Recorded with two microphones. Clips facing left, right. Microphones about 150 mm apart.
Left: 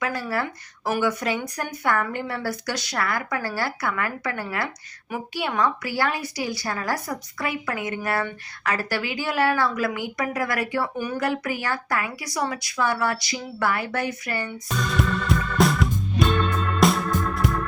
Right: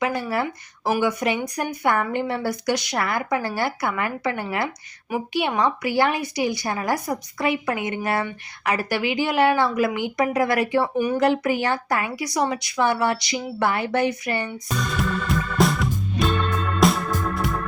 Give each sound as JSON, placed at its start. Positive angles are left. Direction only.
{"t": 0.0, "sound": "speech", "side_deg": -20}
{"t": 14.8, "sound": "music", "side_deg": 0}